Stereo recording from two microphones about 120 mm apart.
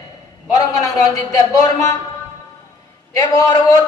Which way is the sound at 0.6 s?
30° left (ahead or behind).